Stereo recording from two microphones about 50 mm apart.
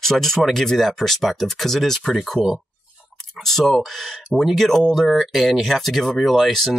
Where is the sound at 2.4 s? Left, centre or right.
Centre.